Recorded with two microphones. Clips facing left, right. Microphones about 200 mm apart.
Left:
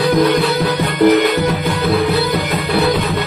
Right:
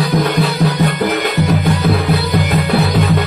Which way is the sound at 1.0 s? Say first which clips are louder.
Left 5 dB; 50° left (ahead or behind).